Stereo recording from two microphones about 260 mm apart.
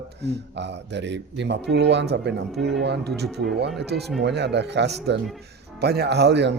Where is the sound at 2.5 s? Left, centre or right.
Centre.